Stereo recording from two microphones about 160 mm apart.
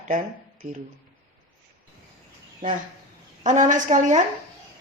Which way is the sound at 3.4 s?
50° right (ahead or behind).